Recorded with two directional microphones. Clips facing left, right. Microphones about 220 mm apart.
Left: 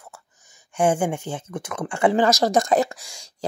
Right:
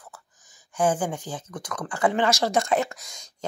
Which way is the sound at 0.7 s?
25° left (ahead or behind).